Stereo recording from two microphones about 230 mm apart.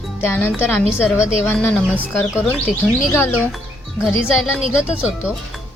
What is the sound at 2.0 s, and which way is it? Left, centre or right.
Speech, centre.